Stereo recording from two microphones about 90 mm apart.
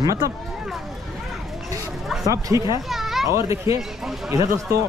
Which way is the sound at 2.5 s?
35° right (ahead or behind).